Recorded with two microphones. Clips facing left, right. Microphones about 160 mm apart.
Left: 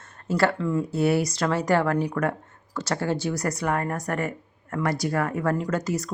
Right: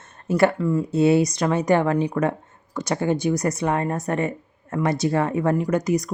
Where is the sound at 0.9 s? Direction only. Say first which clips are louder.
Right 7 dB; 20° right (ahead or behind).